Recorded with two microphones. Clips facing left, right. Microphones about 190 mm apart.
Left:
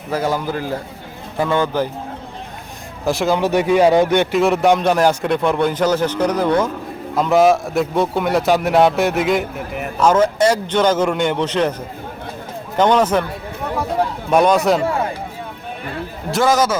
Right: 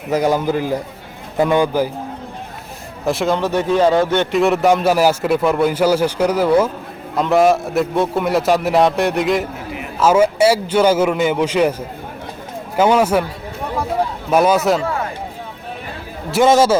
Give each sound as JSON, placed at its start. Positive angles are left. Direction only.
{"t": 0.1, "sound": "a man's voice", "side_deg": -15}
{"t": 3.0, "sound": "a man's voice", "side_deg": 0}
{"t": 3.4, "sound": "speech", "side_deg": 10}
{"t": 4.3, "sound": "a man's voice", "side_deg": 0}
{"t": 12.7, "sound": "a man's voice", "side_deg": -5}
{"t": 14.3, "sound": "a man's voice", "side_deg": -5}
{"t": 16.4, "sound": "a man's voice", "side_deg": -25}